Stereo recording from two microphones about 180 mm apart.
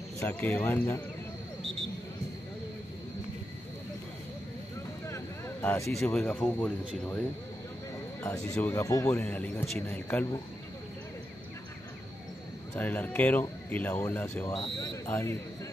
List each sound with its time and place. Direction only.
0.2 s a man's voice: 10° left (ahead or behind)
5.0 s a sound: 15° left (ahead or behind)
5.9 s a man's voice: 5° left (ahead or behind)
8.5 s a man's voice: 10° left (ahead or behind)
12.7 s a man's voice: 10° left (ahead or behind)
14.5 s speech: 25° left (ahead or behind)
15.0 s a man's voice: 10° left (ahead or behind)